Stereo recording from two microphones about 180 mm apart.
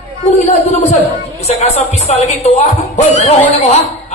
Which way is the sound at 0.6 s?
35° left (ahead or behind).